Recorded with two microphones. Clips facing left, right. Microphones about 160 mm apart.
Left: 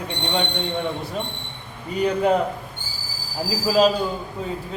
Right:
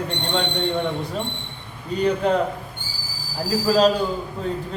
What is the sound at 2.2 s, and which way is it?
Speech, 10° left (ahead or behind).